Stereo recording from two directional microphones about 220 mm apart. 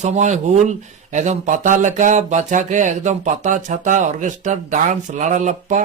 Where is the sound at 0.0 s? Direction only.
35° right (ahead or behind).